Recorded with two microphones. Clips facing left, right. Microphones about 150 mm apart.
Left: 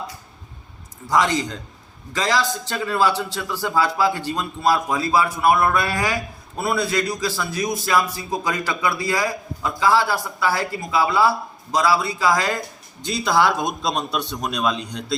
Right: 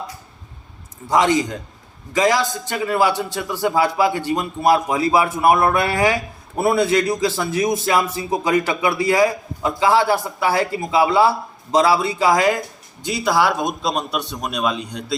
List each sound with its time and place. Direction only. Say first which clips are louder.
1.1 s a man's voice: right 3 dB; 20° right (ahead or behind)